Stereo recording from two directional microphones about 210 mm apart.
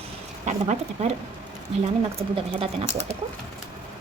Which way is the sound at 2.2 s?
30° right (ahead or behind).